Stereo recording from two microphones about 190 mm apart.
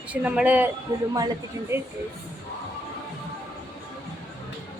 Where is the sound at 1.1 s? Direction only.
20° right (ahead or behind).